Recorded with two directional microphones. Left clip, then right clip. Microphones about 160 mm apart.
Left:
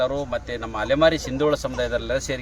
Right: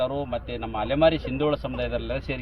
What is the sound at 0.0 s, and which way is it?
Speech, 30° left (ahead or behind).